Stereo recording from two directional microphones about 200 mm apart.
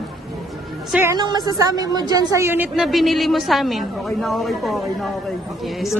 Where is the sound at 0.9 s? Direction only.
10° right (ahead or behind).